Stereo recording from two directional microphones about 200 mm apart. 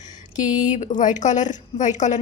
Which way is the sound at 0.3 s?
40° left (ahead or behind).